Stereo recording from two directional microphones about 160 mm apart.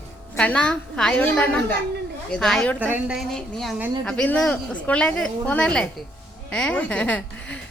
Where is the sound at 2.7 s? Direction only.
10° right (ahead or behind).